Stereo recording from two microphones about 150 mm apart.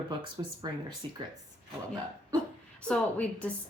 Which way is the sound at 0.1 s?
30° right (ahead or behind).